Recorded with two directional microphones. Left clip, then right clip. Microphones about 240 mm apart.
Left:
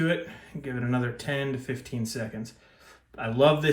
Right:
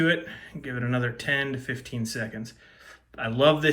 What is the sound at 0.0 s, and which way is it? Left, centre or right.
Speech, centre.